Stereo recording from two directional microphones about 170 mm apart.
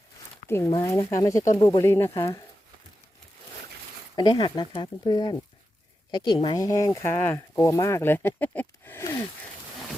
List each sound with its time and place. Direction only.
0.4 s speech: 15° left (ahead or behind)
4.1 s speech: 25° left (ahead or behind)